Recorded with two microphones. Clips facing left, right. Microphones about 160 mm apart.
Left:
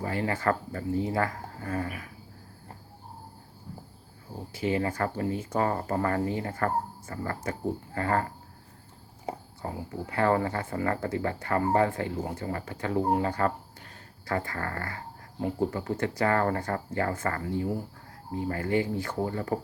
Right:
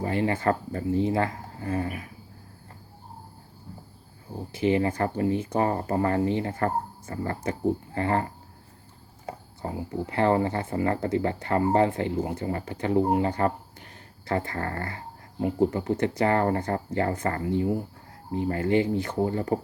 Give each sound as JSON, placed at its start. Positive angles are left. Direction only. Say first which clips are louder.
{"t": 0.0, "sound": "speech", "louder": "right 3 dB", "side_deg": -25}
{"t": 4.5, "sound": "speech", "louder": "right 4 dB", "side_deg": -20}
{"t": 9.6, "sound": "speech", "louder": "right 4 dB", "side_deg": -20}